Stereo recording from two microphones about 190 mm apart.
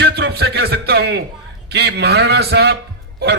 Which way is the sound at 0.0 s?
60° right (ahead or behind).